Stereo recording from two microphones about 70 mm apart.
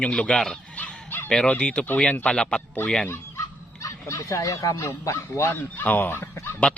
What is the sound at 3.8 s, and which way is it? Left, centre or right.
Speech, left.